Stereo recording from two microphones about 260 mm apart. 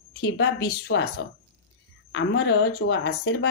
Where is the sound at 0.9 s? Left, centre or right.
Left.